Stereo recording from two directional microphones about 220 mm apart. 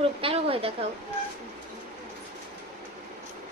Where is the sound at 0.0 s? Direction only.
25° right (ahead or behind).